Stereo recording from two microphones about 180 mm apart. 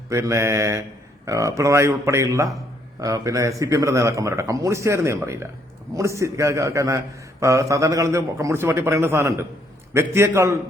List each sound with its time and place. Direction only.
0.1 s a man's voice: 15° right (ahead or behind)